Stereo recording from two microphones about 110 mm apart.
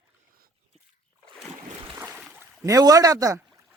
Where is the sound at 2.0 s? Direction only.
10° right (ahead or behind).